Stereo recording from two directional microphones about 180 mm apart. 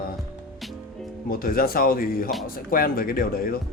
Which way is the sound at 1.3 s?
55° left (ahead or behind).